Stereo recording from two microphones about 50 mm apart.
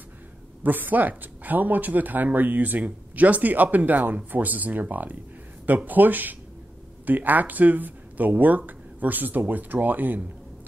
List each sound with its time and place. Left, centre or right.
0.7 s speech: right